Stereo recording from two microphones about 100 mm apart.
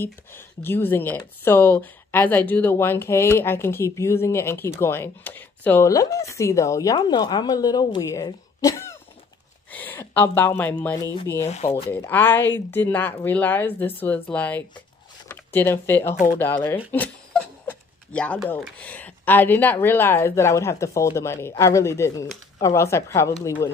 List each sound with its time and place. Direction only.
0.0 s speech: 25° left (ahead or behind)
5.9 s a woman's voice: 30° left (ahead or behind)
9.7 s speech: 15° left (ahead or behind)
11.4 s speech: 90° left
11.7 s speech: 25° left (ahead or behind)
16.9 s a sound: 15° left (ahead or behind)
18.8 s speech: 15° left (ahead or behind)